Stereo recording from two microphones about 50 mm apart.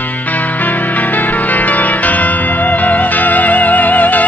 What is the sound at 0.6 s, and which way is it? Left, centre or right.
Music, left.